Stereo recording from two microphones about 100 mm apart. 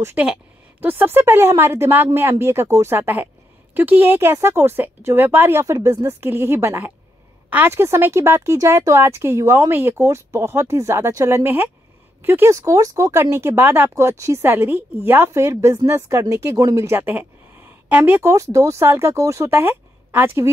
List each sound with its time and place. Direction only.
0.2 s speech: 15° right (ahead or behind)
18.3 s speech: 35° right (ahead or behind)